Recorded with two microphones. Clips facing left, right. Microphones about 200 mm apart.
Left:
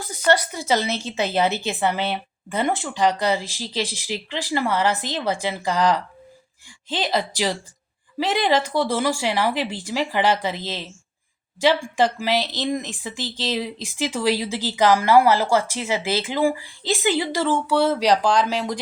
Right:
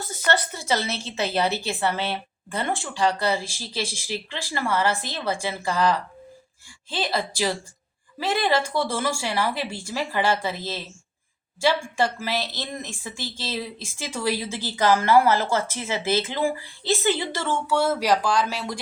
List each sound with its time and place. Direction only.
0.0 s a woman's voice: 15° left (ahead or behind)